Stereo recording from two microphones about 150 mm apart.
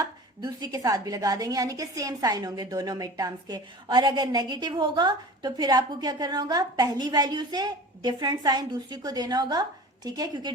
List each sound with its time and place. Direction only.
0.0 s a woman's voice: 25° right (ahead or behind)